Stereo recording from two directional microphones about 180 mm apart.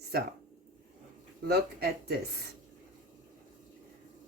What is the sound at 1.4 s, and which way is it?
Speech, 60° right (ahead or behind).